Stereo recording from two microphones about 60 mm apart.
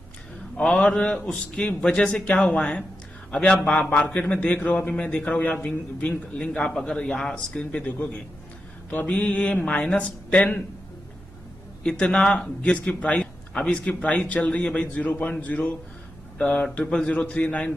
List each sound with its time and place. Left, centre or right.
0.6 s a man's voice: centre
7.5 s a man's voice: left
11.9 s a man's voice: centre
17.0 s a man's voice: left